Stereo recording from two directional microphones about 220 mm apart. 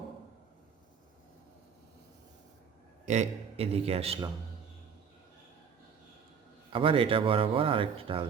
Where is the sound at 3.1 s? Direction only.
30° right (ahead or behind).